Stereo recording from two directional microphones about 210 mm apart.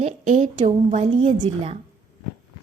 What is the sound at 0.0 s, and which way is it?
A woman's voice, 35° right (ahead or behind).